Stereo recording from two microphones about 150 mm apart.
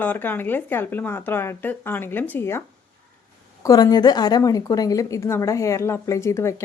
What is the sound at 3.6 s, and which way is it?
A woman's voice, 25° left (ahead or behind).